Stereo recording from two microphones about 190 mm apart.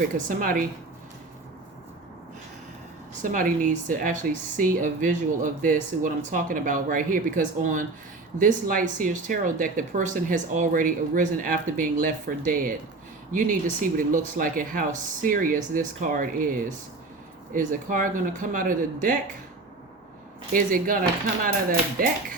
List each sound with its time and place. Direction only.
0.3 s a woman's voice: 45° right (ahead or behind)
3.2 s a woman's voice: 45° right (ahead or behind)
20.5 s a woman's voice: 45° right (ahead or behind)